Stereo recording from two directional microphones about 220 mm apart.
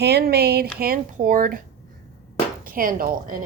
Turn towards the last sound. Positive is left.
turn(degrees=-40)  # may be behind; listen again after turning